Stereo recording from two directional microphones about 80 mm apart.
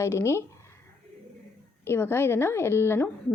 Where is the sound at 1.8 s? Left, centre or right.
Left.